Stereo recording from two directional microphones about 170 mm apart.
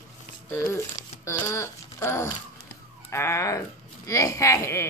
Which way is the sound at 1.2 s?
15° left (ahead or behind).